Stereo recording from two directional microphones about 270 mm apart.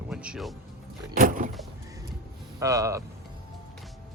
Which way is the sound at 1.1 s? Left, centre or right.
Right.